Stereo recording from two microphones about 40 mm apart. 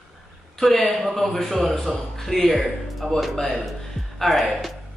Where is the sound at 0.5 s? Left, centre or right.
Centre.